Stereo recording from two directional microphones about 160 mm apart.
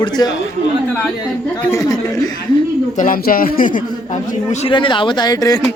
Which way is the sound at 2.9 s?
60° left (ahead or behind).